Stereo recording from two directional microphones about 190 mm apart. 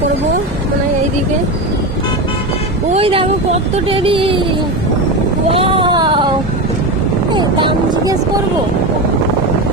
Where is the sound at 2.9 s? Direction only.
30° right (ahead or behind).